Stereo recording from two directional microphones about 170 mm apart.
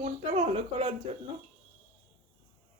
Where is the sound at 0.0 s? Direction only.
35° right (ahead or behind).